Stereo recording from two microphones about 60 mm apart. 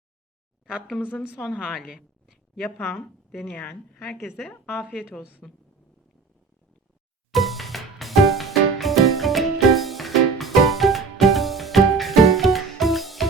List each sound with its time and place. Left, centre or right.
2.7 s a woman's voice: left
4.9 s a woman's voice: centre
7.3 s music: centre